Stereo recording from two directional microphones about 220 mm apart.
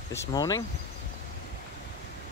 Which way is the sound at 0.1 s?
15° left (ahead or behind).